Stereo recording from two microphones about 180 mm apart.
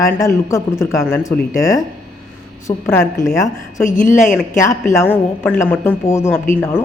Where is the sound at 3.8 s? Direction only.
45° left (ahead or behind).